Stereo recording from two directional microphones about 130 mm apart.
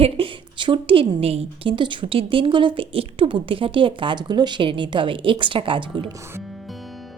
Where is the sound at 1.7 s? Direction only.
40° right (ahead or behind).